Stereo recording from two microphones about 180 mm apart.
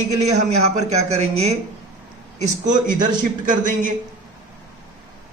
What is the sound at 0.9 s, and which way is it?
Speech, 35° right (ahead or behind).